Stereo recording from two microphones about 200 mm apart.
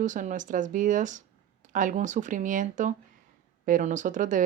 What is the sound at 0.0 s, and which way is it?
Speech, 40° right (ahead or behind).